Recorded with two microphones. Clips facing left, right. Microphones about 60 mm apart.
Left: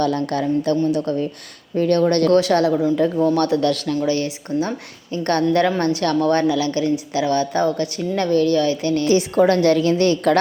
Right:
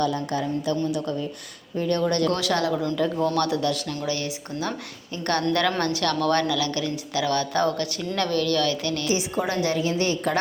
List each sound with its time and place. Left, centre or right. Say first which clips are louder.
0.0 s a woman's voice: left 5 dB; left
1.7 s a woman's voice: left 7 dB; left
2.4 s speech: left 7 dB; left
2.7 s a woman's voice: left 7 dB; centre
3.3 s speech: left 6 dB; left
3.9 s a woman's voice: left 8 dB; left
9.0 s a woman's voice: left 11 dB; left